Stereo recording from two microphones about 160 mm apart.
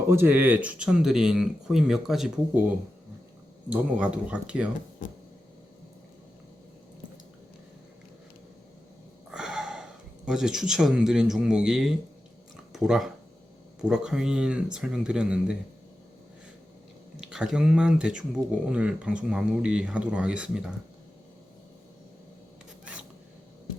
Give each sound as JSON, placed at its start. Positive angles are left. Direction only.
{"t": 0.1, "sound": "speech", "side_deg": -15}
{"t": 3.7, "sound": "speech", "side_deg": -10}
{"t": 5.0, "sound": "a sound", "side_deg": 55}
{"t": 9.3, "sound": "sniff", "side_deg": 0}
{"t": 10.2, "sound": "speech", "side_deg": -5}
{"t": 17.2, "sound": "speech", "side_deg": -5}